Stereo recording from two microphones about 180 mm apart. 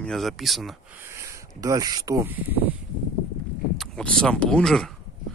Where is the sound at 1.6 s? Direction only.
20° right (ahead or behind).